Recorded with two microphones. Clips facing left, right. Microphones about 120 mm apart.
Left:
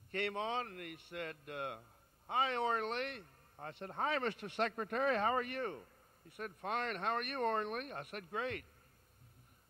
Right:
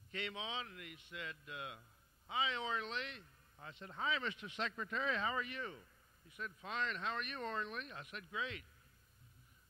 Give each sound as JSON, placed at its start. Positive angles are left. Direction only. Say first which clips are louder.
{"t": 0.1, "sound": "speech", "louder": "left 7 dB", "side_deg": 55}